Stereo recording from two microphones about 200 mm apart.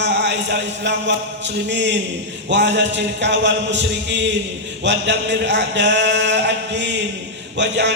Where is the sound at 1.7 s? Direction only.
60° right (ahead or behind).